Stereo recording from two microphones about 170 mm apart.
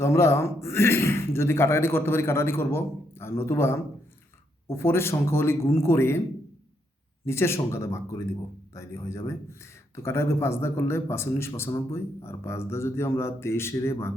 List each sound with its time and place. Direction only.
0.0 s a man's voice: 15° left (ahead or behind)
7.3 s a man's voice: 15° left (ahead or behind)